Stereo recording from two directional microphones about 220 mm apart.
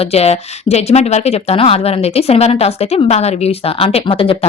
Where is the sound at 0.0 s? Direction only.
30° left (ahead or behind).